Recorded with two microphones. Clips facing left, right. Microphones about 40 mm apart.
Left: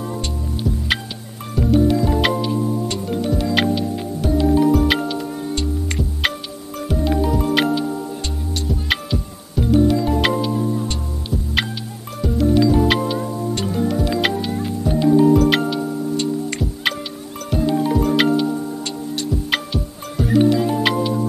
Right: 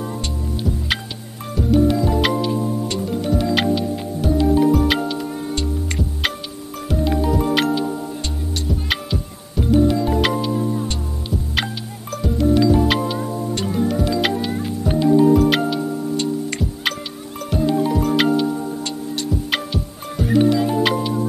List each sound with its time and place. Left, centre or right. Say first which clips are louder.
0.0 s music: left 1 dB; centre
1.5 s music: even; centre
2.3 s music: even; centre